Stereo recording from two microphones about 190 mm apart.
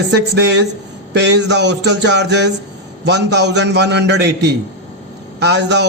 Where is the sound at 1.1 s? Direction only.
65° right (ahead or behind).